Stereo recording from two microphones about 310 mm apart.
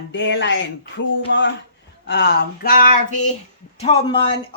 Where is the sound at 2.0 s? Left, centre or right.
Left.